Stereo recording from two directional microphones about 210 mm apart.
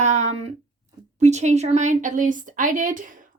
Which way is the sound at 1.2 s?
35° right (ahead or behind).